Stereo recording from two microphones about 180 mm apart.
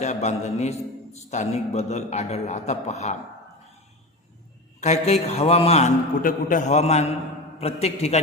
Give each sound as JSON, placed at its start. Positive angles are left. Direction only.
{"t": 0.0, "sound": "a man's voice", "side_deg": 40}
{"t": 4.8, "sound": "a man's voice", "side_deg": 35}
{"t": 6.2, "sound": "a man's voice", "side_deg": 45}